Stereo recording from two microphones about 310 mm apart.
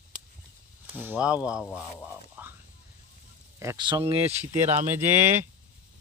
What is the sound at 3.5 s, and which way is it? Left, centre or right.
Speech, centre.